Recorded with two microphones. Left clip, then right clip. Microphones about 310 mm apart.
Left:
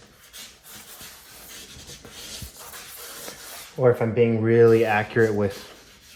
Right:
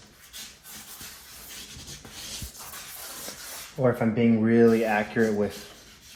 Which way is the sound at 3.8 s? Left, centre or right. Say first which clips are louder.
Left 5 dB; left.